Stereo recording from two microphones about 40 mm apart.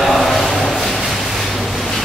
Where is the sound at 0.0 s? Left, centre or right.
Centre.